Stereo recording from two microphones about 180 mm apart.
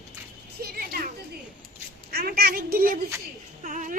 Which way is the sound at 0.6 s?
60° right (ahead or behind).